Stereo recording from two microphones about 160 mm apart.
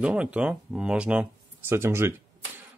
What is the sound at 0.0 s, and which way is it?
Speech, 5° right (ahead or behind).